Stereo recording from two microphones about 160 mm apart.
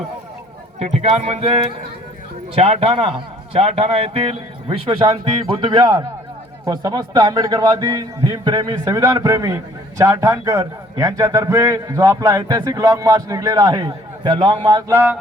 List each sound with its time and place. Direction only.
0.8 s a man's voice: 45° right (ahead or behind); by 15.2 s 10° right (ahead or behind)